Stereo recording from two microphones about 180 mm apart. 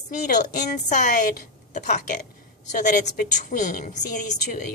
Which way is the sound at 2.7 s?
45° left (ahead or behind).